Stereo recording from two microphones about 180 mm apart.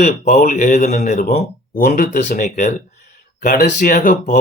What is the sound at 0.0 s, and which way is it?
Speech, 50° left (ahead or behind).